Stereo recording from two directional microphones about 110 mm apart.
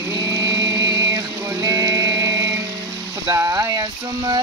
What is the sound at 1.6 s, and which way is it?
Music, 35° right (ahead or behind).